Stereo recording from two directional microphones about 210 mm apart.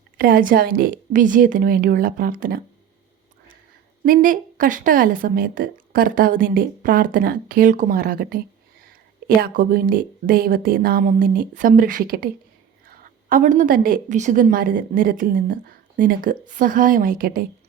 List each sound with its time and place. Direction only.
0.2 s a woman's voice: 45° right (ahead or behind)
4.0 s a woman's voice: 40° right (ahead or behind)